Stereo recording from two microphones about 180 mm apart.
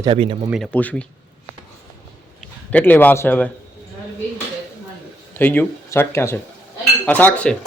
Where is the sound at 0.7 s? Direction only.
5° left (ahead or behind).